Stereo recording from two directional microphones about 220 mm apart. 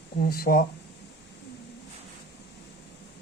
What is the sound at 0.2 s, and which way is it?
Speech, 40° left (ahead or behind).